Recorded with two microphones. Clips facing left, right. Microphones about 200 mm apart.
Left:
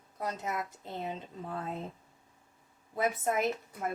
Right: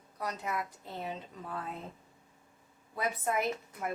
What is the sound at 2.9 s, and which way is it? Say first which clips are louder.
Speech: left 2 dB; 20° left (ahead or behind).